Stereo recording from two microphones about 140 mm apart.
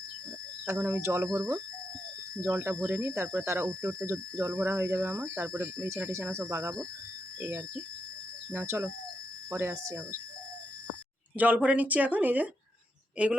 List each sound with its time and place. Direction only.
0.6 s speech: 20° right (ahead or behind)
11.3 s speech: 10° right (ahead or behind)